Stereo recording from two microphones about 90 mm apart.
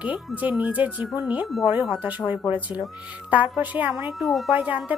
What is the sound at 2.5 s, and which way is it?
Speech, 20° right (ahead or behind).